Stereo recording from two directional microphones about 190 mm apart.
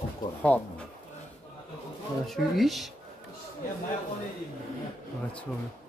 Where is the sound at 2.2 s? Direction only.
Centre (ahead or behind).